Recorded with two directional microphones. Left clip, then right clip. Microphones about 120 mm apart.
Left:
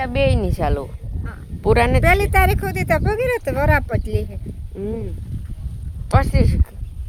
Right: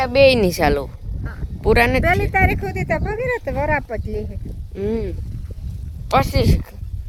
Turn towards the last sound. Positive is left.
turn(degrees=-40)  # may be behind; listen again after turning